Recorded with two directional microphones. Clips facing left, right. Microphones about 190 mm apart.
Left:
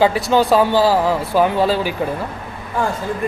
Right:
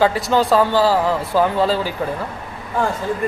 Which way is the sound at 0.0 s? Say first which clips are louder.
Left 2 dB; 15° left (ahead or behind).